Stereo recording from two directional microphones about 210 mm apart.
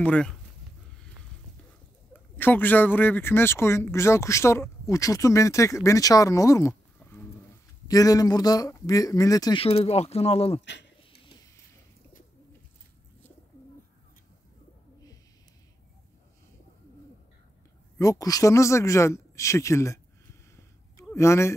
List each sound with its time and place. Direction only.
0.0 s speech: 5° left (ahead or behind)
2.1 s speech: 10° left (ahead or behind); by 10.6 s 30° left (ahead or behind)
10.6 s speech: 55° left (ahead or behind)
17.9 s speech: 15° left (ahead or behind)
20.5 s a sound: 15° left (ahead or behind)